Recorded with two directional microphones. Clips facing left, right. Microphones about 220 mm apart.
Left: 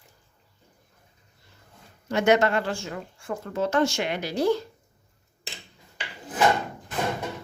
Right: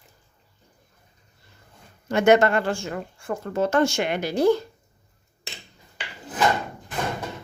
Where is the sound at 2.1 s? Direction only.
50° right (ahead or behind).